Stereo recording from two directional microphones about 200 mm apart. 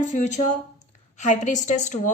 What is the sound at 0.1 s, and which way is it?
A woman's voice, 35° left (ahead or behind).